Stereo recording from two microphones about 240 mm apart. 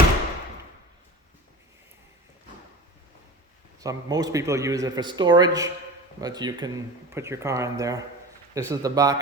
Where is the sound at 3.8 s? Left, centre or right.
Centre.